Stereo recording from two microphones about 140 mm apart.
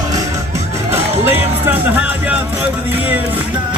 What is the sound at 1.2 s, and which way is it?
Speech, 15° right (ahead or behind).